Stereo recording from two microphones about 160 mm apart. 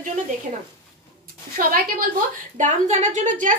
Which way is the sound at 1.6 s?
60° right (ahead or behind).